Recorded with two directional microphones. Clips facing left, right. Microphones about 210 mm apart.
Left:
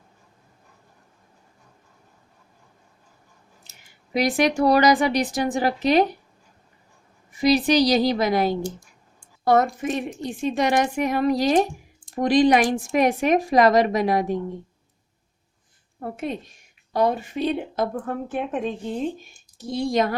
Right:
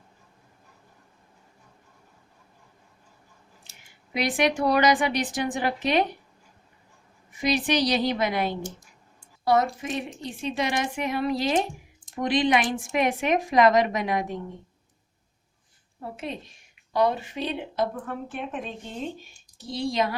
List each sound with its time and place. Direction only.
4.1 s speech: 40° left (ahead or behind)
7.3 s a woman's voice: 40° left (ahead or behind)
16.0 s a woman's voice: 50° left (ahead or behind)
19.6 s a woman's voice: 50° left (ahead or behind)